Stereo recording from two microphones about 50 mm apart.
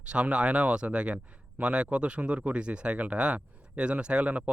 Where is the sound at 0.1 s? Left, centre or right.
Right.